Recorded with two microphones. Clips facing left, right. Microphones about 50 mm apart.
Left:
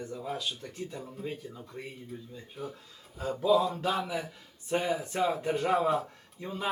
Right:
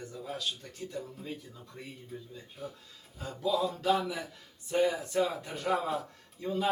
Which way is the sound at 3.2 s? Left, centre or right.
Centre.